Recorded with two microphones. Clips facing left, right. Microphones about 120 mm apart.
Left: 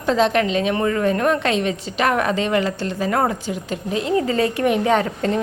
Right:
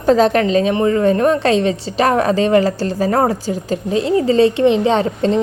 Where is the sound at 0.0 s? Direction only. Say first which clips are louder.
Right 5 dB; 40° right (ahead or behind).